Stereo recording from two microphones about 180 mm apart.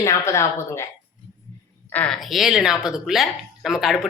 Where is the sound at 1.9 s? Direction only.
5° left (ahead or behind).